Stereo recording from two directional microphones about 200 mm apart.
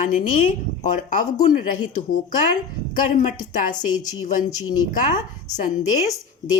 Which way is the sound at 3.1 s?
40° left (ahead or behind).